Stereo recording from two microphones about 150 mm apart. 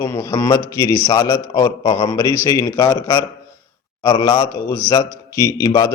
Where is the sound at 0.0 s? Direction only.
20° left (ahead or behind).